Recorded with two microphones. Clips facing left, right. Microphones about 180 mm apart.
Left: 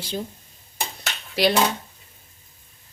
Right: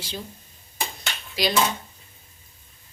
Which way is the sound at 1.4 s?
65° left (ahead or behind).